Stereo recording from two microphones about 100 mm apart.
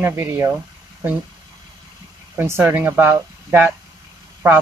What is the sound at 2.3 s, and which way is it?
Speech, 25° right (ahead or behind).